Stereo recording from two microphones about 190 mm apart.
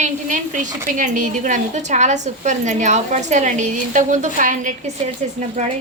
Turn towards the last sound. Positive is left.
turn(degrees=-40)  # may be behind; listen again after turning